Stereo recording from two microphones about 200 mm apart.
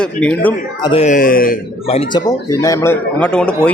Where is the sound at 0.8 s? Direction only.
30° left (ahead or behind); by 1.6 s 45° left (ahead or behind).